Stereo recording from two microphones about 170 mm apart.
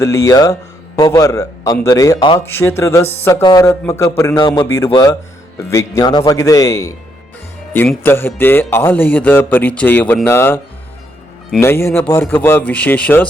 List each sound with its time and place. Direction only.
0.0 s a man's voice: 20° left (ahead or behind)
2.4 s a man's voice: 15° left (ahead or behind)
11.6 s a man's voice: 15° left (ahead or behind)